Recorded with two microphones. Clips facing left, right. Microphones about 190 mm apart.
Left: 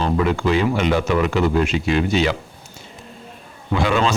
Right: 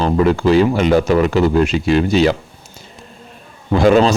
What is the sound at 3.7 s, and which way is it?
Speech, 40° right (ahead or behind).